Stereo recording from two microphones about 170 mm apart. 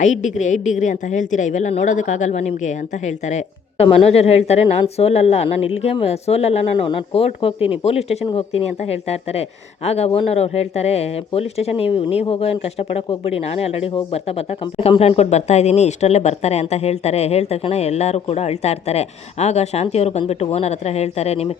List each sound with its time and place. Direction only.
0.0 s a woman's voice: 45° left (ahead or behind)